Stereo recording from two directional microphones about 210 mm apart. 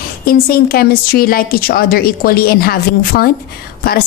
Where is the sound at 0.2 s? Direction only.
45° left (ahead or behind).